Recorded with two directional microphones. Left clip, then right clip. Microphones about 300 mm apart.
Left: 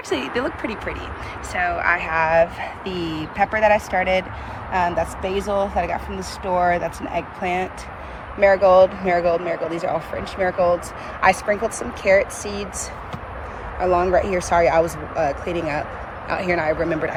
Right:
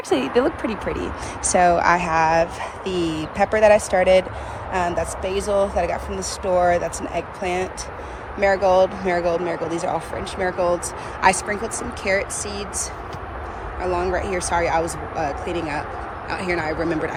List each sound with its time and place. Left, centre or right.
0.1 s speech: centre
5.2 s speech: right
5.5 s speech: centre
13.7 s speech: centre